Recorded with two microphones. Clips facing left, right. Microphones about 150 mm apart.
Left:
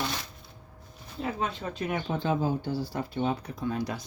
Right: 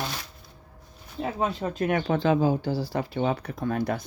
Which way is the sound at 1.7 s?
55° right (ahead or behind).